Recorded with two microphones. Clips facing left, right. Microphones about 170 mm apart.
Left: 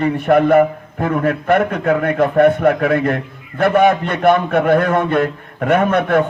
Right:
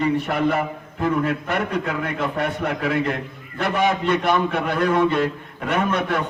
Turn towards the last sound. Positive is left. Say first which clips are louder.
# left 7 dB
turn(degrees=55)  # may be behind; listen again after turning